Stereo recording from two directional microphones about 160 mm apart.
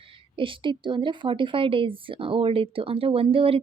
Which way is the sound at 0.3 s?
30° right (ahead or behind).